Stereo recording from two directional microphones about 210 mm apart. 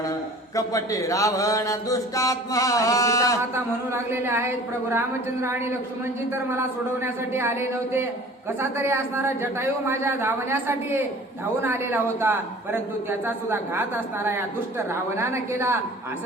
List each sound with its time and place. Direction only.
0.5 s mantra: 15° left (ahead or behind)
3.5 s a man's voice: 10° right (ahead or behind)